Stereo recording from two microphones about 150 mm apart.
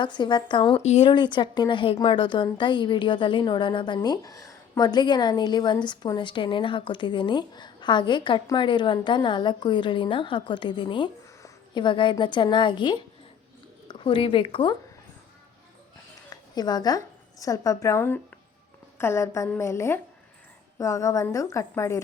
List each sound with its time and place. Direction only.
0.0 s a woman's voice: 30° left (ahead or behind)
0.8 s speech: 50° left (ahead or behind)
1.0 s a woman's voice: 30° left (ahead or behind)
16.3 s a sound: 25° left (ahead or behind)
17.4 s a woman's voice: 25° left (ahead or behind)